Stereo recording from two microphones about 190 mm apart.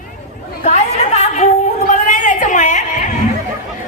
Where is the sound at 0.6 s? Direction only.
35° left (ahead or behind).